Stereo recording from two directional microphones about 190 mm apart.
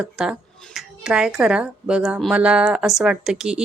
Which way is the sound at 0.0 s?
Centre (ahead or behind).